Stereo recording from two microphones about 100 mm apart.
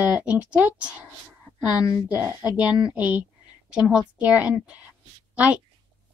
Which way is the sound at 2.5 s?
45° left (ahead or behind).